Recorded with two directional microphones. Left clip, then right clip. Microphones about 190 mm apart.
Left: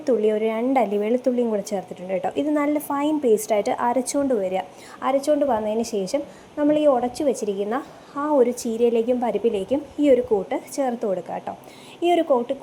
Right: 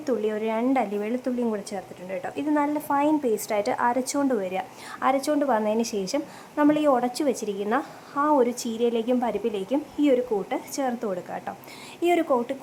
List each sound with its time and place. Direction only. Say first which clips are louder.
0.0 s speech: left 6 dB; 5° left (ahead or behind)